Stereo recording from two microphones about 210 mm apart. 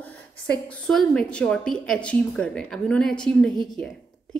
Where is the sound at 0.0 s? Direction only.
5° left (ahead or behind).